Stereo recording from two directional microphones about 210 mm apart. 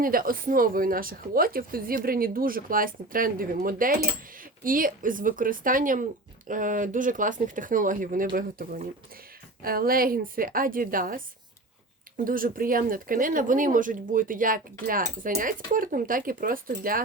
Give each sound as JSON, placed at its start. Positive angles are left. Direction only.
{"t": 0.0, "sound": "speech", "side_deg": -45}